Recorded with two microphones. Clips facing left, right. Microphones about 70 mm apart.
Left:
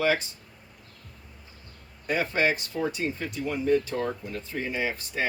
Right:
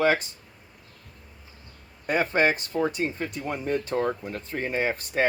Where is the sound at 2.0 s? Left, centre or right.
Right.